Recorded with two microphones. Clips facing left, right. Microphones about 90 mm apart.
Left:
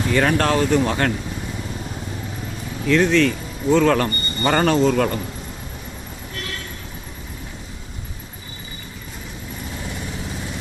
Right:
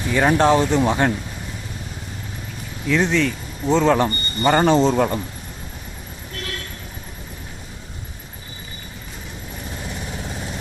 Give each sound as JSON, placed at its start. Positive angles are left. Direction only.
{"t": 0.1, "sound": "speech", "side_deg": -15}
{"t": 2.8, "sound": "speech", "side_deg": -15}
{"t": 4.7, "sound": "speech", "side_deg": -25}
{"t": 4.9, "sound": "speech", "side_deg": -15}